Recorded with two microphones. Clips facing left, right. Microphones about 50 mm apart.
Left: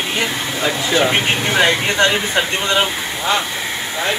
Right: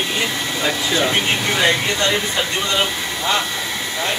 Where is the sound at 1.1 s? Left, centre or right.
Left.